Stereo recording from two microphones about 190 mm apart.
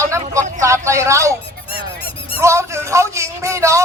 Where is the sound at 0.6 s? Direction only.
15° right (ahead or behind).